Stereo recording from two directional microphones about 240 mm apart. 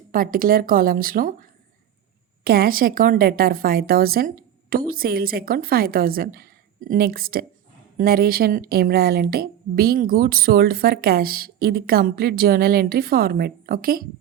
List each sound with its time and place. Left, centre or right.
0.1 s speech: right
2.4 s speech: right